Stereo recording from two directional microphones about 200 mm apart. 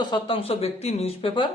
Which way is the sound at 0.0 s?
25° left (ahead or behind).